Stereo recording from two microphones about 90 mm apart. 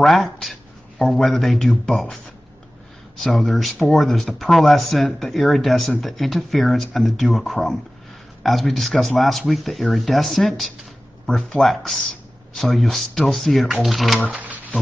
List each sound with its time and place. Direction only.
0.0 s speech: centre (ahead or behind)
3.3 s speech: centre (ahead or behind)
14.3 s speech: 15° right (ahead or behind)